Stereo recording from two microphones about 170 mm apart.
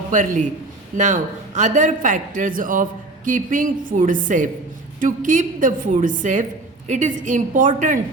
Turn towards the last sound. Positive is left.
turn(degrees=-50)  # may be behind; listen again after turning